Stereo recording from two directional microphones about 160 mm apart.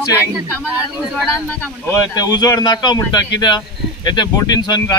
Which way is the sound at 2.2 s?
25° left (ahead or behind).